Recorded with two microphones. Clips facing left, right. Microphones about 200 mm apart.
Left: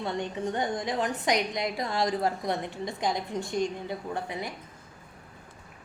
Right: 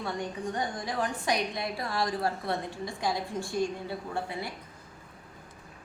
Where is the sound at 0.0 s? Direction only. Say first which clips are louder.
Left 3 dB; 25° left (ahead or behind).